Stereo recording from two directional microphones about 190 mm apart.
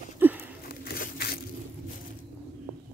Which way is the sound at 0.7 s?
55° left (ahead or behind).